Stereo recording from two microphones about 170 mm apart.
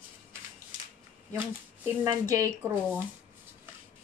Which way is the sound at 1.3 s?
10° right (ahead or behind).